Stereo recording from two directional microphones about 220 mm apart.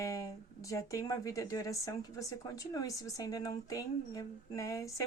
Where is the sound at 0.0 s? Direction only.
15° left (ahead or behind).